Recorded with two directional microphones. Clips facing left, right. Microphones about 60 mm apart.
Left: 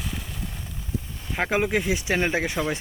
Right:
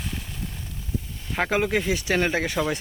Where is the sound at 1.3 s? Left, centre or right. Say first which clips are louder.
Even; centre.